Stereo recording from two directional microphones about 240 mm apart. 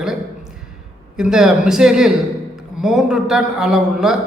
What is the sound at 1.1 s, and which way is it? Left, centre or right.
A man's voice, centre.